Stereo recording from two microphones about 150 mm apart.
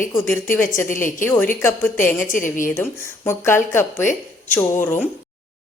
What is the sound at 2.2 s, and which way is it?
Speech, 60° left (ahead or behind).